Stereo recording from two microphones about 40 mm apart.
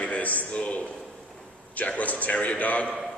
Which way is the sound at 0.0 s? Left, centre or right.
Left.